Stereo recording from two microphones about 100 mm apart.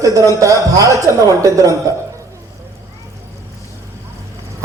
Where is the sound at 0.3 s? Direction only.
30° right (ahead or behind).